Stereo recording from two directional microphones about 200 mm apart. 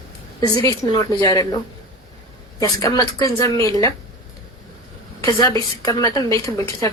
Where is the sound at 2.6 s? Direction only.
15° left (ahead or behind).